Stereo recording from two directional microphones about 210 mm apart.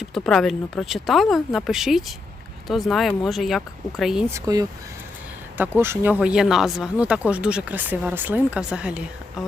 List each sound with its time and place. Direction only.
0.0 s speech: centre (ahead or behind)
4.4 s speech: 15° right (ahead or behind)
5.8 s speech: 10° right (ahead or behind)